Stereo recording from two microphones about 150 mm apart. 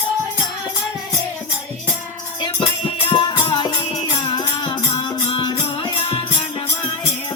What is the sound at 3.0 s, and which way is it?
Music, 30° left (ahead or behind).